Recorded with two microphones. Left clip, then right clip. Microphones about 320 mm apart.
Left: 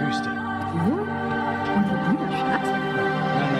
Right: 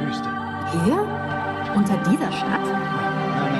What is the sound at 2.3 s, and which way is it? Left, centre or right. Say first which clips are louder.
Speech: even; centre.